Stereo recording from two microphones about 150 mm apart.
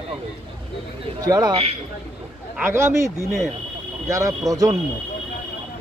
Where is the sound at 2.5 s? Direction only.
15° right (ahead or behind).